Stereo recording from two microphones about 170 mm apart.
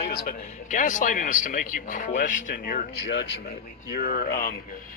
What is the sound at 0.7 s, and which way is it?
Speech, 50° left (ahead or behind).